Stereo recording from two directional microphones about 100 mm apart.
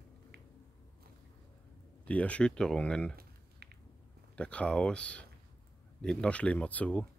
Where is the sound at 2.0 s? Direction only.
15° left (ahead or behind).